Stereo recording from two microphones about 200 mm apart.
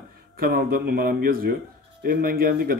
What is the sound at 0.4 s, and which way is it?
A man's voice, 50° right (ahead or behind).